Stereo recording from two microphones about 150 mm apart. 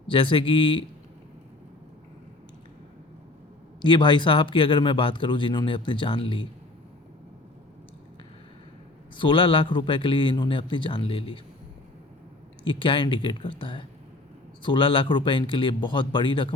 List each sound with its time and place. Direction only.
0.1 s speech: 35° left (ahead or behind)
3.8 s speech: 30° left (ahead or behind)
9.1 s speech: 35° left (ahead or behind)
12.6 s speech: 35° left (ahead or behind)